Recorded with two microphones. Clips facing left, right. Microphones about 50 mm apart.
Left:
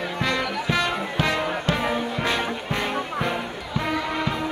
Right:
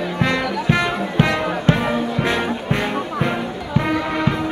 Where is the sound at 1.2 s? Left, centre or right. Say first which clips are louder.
Right 6 dB; right.